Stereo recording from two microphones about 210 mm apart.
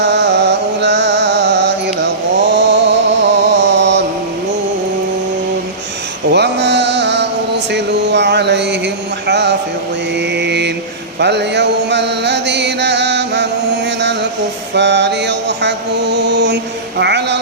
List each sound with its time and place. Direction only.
0.0 s music: 55° right (ahead or behind)
6.3 s mantra: 55° right (ahead or behind)
7.7 s a sound: 55° right (ahead or behind)
10.3 s mantra: 55° right (ahead or behind)
11.2 s chant: 55° right (ahead or behind)
14.8 s mantra: 55° right (ahead or behind)
17.0 s a sound: 55° right (ahead or behind)